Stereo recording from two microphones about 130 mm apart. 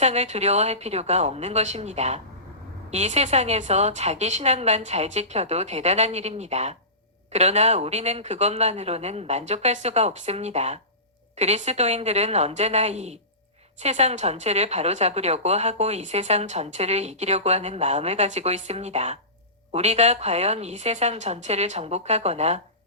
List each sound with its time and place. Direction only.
0.0 s a woman's voice: 55° right (ahead or behind)